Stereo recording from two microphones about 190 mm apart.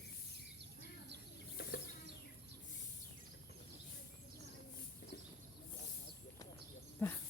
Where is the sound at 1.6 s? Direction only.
55° left (ahead or behind).